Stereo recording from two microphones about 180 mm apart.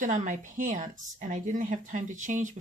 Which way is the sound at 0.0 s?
45° right (ahead or behind).